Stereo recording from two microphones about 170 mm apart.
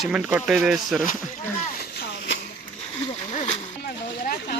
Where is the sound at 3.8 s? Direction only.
60° left (ahead or behind).